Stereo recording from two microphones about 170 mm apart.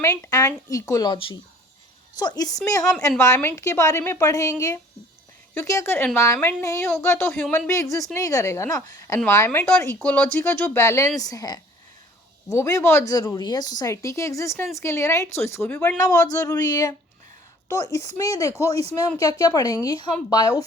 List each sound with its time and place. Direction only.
0.0 s a woman's voice: 20° left (ahead or behind)
16.0 s a woman's voice: 20° left (ahead or behind)
18.7 s speech: 35° right (ahead or behind)
19.2 s a woman's voice: 20° left (ahead or behind)